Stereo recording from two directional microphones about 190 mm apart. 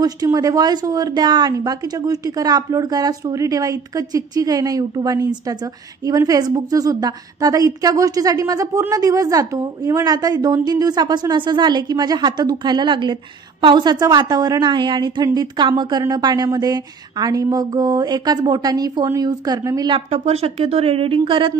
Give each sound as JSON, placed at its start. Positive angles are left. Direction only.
{"t": 0.0, "sound": "a woman's voice", "side_deg": -20}
{"t": 20.1, "sound": "speech", "side_deg": -35}